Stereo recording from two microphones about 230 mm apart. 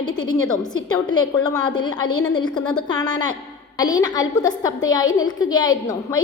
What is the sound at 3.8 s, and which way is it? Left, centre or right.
A woman's voice, centre.